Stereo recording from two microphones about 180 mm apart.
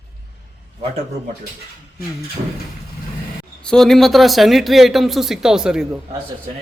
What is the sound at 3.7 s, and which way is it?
Speech, centre (ahead or behind).